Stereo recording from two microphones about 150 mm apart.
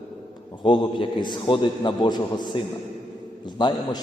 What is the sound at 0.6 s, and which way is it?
A man's voice, 35° left (ahead or behind).